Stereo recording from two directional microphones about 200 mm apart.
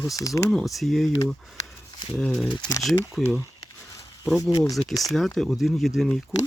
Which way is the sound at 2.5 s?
20° left (ahead or behind).